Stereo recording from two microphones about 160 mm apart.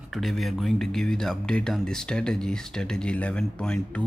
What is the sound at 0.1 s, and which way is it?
Speech, centre (ahead or behind).